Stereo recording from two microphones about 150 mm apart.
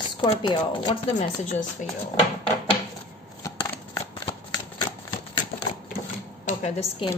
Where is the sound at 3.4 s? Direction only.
20° left (ahead or behind).